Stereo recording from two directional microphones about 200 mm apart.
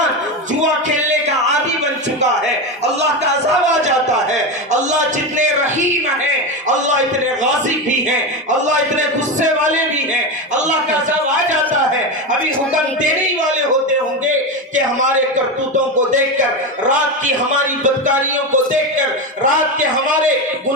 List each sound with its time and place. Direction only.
0.6 s music: 40° right (ahead or behind)
4.7 s a sound: 35° right (ahead or behind)
8.4 s music: 40° right (ahead or behind)
17.8 s music: 40° right (ahead or behind)